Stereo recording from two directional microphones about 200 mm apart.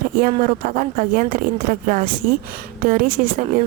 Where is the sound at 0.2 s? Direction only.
40° right (ahead or behind).